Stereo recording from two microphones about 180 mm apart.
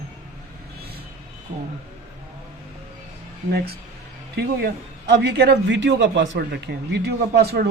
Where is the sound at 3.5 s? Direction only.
60° right (ahead or behind).